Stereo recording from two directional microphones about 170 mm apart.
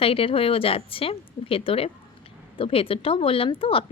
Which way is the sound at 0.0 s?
35° left (ahead or behind).